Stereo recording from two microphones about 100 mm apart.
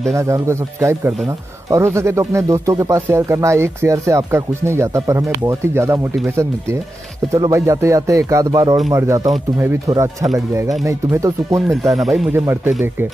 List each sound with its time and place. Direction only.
0.1 s speech: 30° right (ahead or behind)
11.7 s speech: centre (ahead or behind)
12.3 s speech: 20° right (ahead or behind)